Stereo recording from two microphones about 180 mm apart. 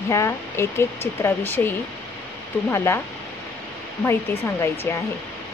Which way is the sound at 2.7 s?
15° left (ahead or behind).